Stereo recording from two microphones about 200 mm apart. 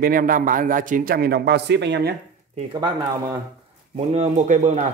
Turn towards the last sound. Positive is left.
turn(degrees=-40)  # may be behind; listen again after turning